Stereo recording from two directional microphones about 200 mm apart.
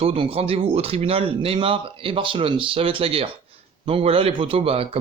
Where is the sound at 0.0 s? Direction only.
25° right (ahead or behind).